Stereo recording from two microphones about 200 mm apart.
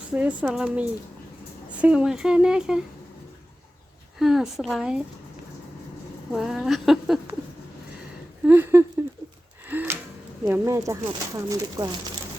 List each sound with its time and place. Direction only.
0.1 s speech: 5° right (ahead or behind)
4.2 s speech: centre (ahead or behind)
6.3 s speech: centre (ahead or behind)
8.4 s a sound: 10° right (ahead or behind)
10.4 s speech: 15° right (ahead or behind)